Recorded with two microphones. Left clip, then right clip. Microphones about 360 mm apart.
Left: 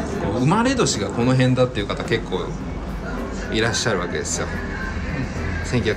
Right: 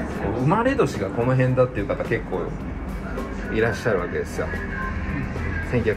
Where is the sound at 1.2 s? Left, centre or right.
Centre.